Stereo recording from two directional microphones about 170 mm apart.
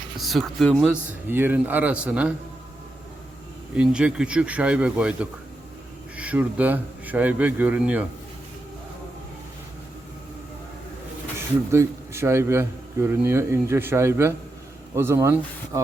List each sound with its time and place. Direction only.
0.2 s speech: centre (ahead or behind)
3.8 s speech: 5° right (ahead or behind)
11.7 s speech: 15° right (ahead or behind)